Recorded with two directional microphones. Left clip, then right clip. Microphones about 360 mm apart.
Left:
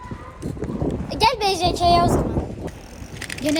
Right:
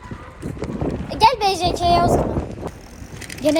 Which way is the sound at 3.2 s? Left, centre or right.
Left.